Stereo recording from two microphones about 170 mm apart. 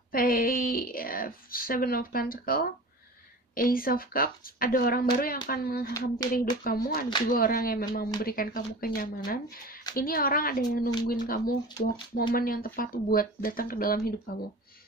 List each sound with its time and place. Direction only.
0.1 s speech: 60° left (ahead or behind)